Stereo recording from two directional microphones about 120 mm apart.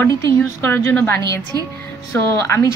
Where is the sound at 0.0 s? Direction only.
20° left (ahead or behind).